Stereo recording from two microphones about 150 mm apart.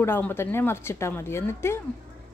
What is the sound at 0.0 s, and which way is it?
A woman's voice, 15° left (ahead or behind).